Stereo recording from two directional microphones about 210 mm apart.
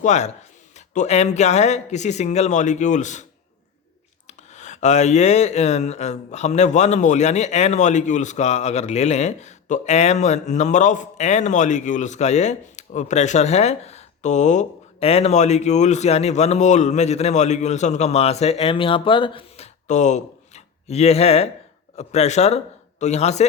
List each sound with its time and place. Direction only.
0.0 s speech: 35° left (ahead or behind)
4.3 s a man's voice: 35° left (ahead or behind)